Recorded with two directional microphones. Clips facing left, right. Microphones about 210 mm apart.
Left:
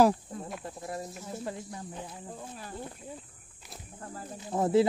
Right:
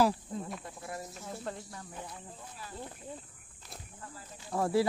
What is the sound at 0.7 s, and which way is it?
Cricket, 30° left (ahead or behind).